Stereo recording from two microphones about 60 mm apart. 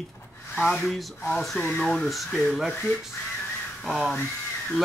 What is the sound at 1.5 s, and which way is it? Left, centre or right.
Speech, left.